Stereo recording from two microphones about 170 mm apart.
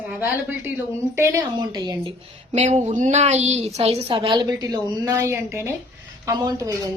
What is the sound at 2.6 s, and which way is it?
A woman's voice, 45° right (ahead or behind).